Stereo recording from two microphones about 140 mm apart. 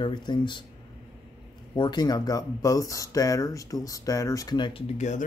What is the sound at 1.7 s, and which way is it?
Speech, 30° left (ahead or behind).